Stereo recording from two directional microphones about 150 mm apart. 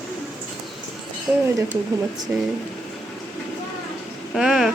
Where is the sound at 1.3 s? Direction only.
Centre (ahead or behind).